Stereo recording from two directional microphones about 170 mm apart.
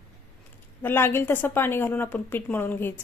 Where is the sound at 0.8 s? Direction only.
15° left (ahead or behind).